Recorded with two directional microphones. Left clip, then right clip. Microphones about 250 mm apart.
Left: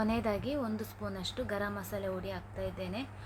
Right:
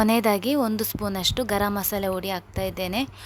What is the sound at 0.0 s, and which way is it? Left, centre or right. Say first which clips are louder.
A woman's voice: right 12 dB; right.